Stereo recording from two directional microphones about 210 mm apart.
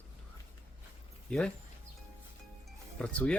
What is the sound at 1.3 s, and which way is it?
Speech, 5° left (ahead or behind).